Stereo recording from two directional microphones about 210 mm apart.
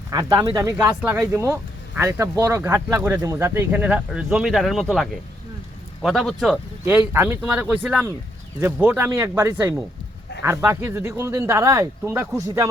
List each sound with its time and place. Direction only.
0.1 s speech: 15° right (ahead or behind)